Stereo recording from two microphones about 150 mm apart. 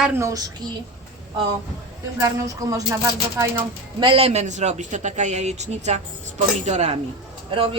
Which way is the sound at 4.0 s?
40° right (ahead or behind).